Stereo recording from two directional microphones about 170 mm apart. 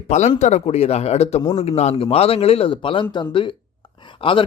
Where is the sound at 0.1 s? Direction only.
45° left (ahead or behind).